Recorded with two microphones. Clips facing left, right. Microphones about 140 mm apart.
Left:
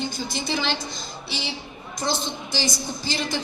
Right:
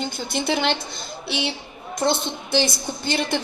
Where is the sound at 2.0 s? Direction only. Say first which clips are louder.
Right 5 dB; 60° right (ahead or behind).